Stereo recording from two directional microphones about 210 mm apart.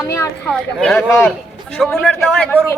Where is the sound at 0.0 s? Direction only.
15° left (ahead or behind).